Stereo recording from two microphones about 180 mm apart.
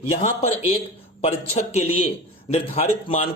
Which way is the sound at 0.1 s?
35° left (ahead or behind).